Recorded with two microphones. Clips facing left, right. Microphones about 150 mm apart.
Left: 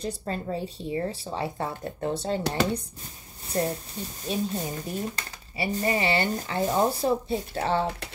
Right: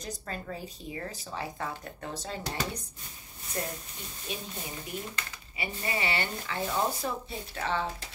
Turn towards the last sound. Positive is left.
turn(degrees=35)  # may be behind; listen again after turning